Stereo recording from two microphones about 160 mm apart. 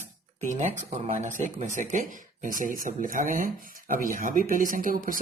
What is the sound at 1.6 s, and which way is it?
Speech, 50° right (ahead or behind).